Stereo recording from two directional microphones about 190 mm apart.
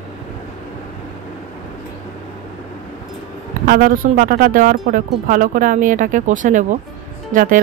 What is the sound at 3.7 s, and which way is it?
Speech, 50° right (ahead or behind).